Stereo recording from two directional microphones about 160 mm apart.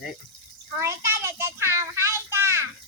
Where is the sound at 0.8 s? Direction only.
15° right (ahead or behind).